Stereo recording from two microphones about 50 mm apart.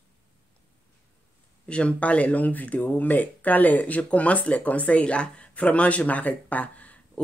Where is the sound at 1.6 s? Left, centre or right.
Left.